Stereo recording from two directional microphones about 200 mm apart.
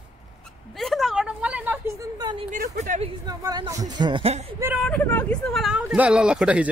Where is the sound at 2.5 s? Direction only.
50° right (ahead or behind).